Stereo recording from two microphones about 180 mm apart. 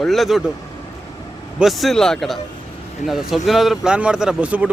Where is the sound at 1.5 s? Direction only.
Centre (ahead or behind).